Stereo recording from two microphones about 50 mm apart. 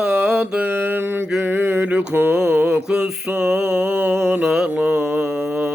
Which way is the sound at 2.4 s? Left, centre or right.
Right.